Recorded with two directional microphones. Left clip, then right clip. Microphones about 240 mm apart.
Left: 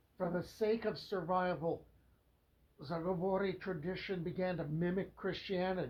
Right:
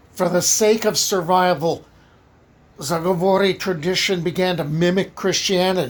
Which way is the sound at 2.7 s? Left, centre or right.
Right.